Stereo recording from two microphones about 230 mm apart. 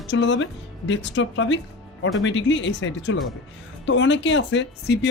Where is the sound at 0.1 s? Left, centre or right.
Left.